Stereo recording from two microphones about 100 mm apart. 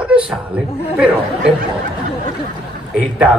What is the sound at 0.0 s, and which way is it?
Chuckle, 10° right (ahead or behind).